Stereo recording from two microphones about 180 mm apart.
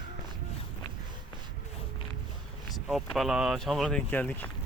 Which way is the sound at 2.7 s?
Centre (ahead or behind).